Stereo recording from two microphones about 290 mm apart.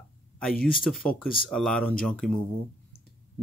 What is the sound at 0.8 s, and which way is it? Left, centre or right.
Speech, centre.